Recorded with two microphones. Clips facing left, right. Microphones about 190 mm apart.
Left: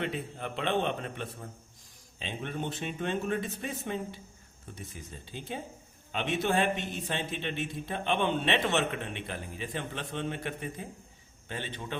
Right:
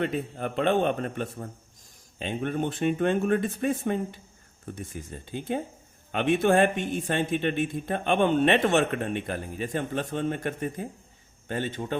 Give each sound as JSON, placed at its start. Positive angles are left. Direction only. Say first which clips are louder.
{"t": 0.0, "sound": "a man's voice", "louder": "right 6 dB", "side_deg": -50}